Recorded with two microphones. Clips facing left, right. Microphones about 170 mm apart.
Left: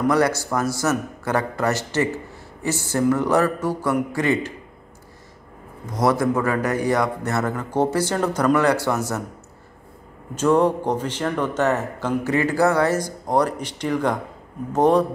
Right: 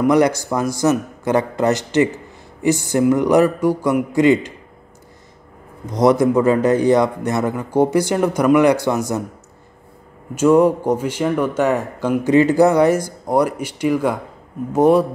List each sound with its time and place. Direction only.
0.1 s speech: 15° right (ahead or behind)
5.9 s speech: 20° right (ahead or behind)
10.3 s speech: 10° right (ahead or behind)